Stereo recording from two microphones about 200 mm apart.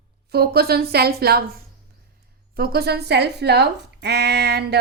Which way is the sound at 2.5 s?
50° right (ahead or behind).